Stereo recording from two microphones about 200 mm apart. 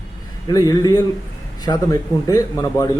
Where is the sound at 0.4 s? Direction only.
20° left (ahead or behind).